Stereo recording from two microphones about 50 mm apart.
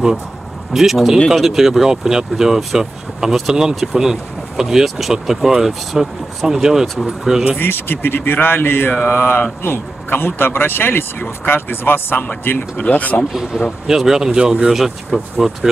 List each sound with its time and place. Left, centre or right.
0.7 s speech: centre
7.5 s a man's voice: left
12.7 s speech: left
13.3 s speech: centre
14.7 s speech: centre